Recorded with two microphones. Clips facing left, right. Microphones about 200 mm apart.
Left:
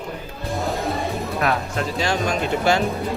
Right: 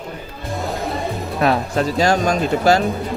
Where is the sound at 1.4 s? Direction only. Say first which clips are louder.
Right 7 dB; 40° right (ahead or behind).